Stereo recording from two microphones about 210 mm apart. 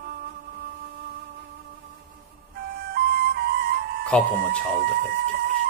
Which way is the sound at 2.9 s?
50° right (ahead or behind).